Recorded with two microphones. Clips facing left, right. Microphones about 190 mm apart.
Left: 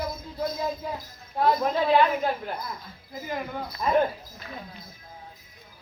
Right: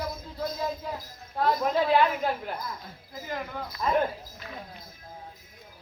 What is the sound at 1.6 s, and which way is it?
Speech, 5° right (ahead or behind).